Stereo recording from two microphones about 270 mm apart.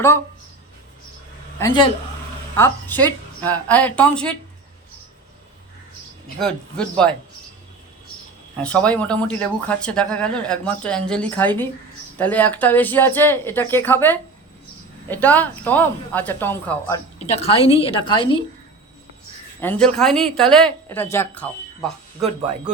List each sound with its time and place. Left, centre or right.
1.5 s speech: centre
6.4 s speech: centre
8.6 s speech: centre
17.2 s a woman's voice: left
19.6 s speech: centre